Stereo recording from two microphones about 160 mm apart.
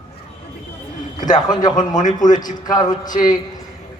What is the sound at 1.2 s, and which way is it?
Speech, 55° left (ahead or behind).